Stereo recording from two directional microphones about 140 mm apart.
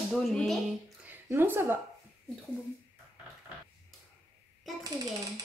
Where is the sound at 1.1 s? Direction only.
15° right (ahead or behind).